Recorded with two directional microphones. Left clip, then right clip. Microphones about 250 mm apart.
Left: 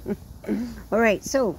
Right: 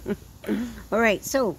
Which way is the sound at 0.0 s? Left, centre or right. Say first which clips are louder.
Right 1 dB; centre.